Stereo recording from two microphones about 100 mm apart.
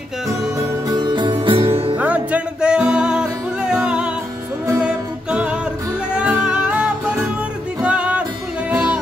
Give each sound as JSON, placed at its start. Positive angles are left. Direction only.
{"t": 0.8, "sound": "music", "side_deg": -45}
{"t": 2.0, "sound": "music", "side_deg": -15}